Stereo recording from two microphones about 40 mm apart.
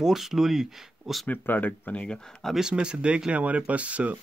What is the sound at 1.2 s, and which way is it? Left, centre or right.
Speech, left.